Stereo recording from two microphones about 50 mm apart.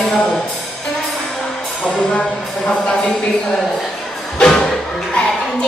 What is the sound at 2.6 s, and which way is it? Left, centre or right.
Music, centre.